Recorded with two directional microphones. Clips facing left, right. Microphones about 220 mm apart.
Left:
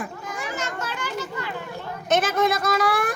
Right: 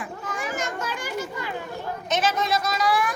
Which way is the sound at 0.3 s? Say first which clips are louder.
Right 1 dB; 15° right (ahead or behind).